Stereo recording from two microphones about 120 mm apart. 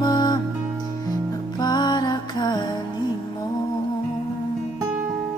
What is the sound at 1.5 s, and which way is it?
Music, 35° left (ahead or behind).